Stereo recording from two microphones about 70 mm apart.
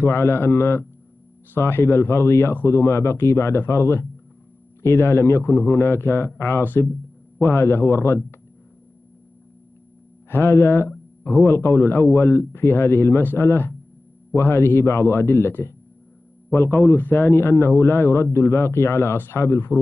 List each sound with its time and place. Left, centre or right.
0.0 s a man's voice: left
10.3 s a man's voice: left